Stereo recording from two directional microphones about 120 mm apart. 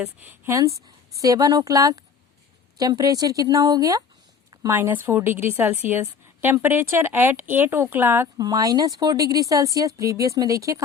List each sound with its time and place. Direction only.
0.2 s a woman's voice: 20° right (ahead or behind)
4.7 s a woman's voice: 15° right (ahead or behind)
8.4 s a woman's voice: 30° right (ahead or behind)